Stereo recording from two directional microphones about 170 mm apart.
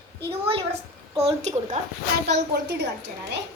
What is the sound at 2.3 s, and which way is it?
Speech, 85° right.